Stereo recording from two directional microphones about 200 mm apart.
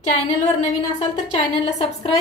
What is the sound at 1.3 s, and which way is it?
Speech, 25° left (ahead or behind).